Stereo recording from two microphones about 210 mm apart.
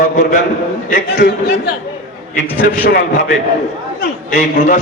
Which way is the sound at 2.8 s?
50° left (ahead or behind).